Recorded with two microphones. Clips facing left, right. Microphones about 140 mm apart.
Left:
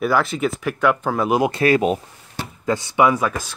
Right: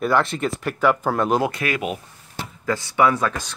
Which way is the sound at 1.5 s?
35° left (ahead or behind).